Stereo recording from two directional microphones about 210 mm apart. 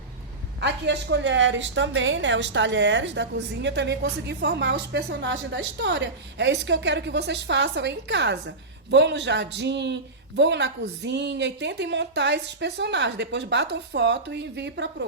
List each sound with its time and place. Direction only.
0.6 s a woman's voice: 55° right (ahead or behind)